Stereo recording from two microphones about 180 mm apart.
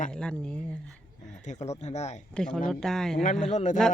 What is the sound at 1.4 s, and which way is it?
Speech, 40° left (ahead or behind).